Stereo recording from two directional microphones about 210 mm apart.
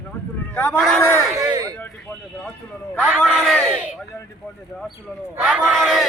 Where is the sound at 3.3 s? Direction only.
5° right (ahead or behind).